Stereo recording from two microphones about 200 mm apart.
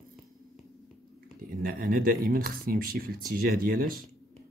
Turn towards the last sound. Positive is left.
turn(degrees=-45)  # may be behind; listen again after turning